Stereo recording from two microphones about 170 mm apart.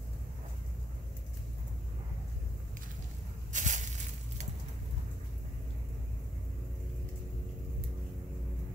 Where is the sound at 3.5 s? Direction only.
45° right (ahead or behind).